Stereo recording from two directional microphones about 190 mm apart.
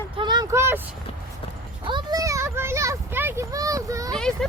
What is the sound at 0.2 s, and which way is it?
Vehicle, 20° right (ahead or behind).